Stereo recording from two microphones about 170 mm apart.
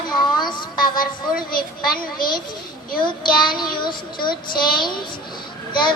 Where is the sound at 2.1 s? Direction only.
25° left (ahead or behind).